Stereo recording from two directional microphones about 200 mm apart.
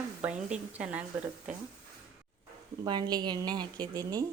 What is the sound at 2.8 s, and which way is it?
A woman's voice, 20° right (ahead or behind).